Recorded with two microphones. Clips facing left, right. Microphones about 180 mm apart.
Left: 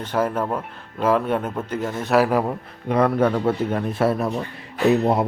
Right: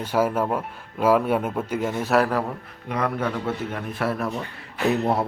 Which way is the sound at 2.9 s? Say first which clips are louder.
Left 7 dB; 35° left (ahead or behind).